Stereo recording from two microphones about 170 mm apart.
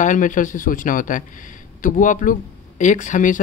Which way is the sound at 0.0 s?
50° left (ahead or behind).